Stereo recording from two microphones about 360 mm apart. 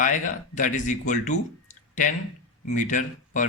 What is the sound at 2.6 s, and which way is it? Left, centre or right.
Speech, left.